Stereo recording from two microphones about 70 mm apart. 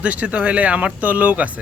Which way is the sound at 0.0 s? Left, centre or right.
Centre.